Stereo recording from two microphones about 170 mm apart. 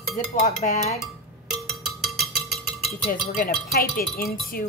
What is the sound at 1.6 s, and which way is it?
Music, centre (ahead or behind).